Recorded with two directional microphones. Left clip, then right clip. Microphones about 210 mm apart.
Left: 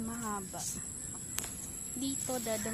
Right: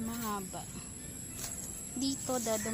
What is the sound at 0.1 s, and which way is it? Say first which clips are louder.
Snake: right 2 dB; 5° right (ahead or behind).